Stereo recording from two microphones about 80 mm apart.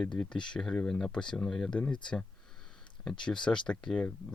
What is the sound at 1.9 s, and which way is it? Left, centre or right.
Speech, left.